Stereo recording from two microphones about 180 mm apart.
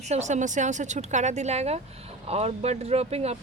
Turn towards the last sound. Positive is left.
turn(degrees=-35)  # may be behind; listen again after turning